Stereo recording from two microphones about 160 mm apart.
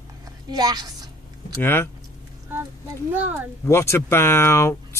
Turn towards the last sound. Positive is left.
turn(degrees=15)  # may be behind; listen again after turning